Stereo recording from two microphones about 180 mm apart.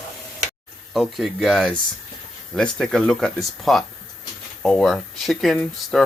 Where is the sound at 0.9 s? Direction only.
Centre (ahead or behind).